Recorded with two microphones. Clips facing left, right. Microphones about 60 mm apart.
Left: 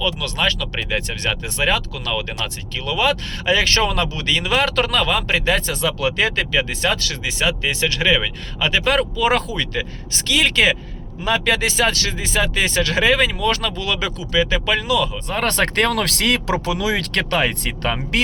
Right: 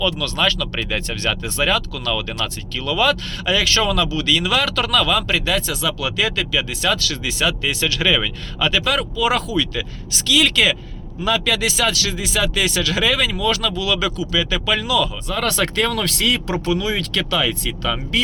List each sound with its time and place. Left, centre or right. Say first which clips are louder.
0.0 s speech: right 1 dB; centre
15.3 s speech: left 1 dB; left
17.1 s speech: left 1 dB; left